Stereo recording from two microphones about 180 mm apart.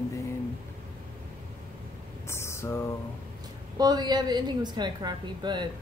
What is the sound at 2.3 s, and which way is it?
Speech, 15° left (ahead or behind).